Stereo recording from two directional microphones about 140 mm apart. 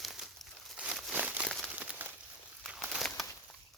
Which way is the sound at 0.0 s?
Centre (ahead or behind).